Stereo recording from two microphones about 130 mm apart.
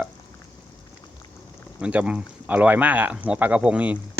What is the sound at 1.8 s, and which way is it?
Speech, 10° right (ahead or behind).